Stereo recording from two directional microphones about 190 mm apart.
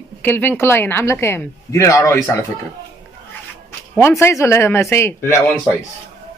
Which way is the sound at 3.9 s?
15° left (ahead or behind).